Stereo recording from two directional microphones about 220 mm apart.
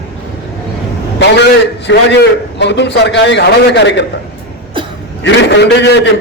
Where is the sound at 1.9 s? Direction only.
55° left (ahead or behind).